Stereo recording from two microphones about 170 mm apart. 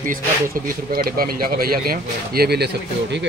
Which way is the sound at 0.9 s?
60° right (ahead or behind).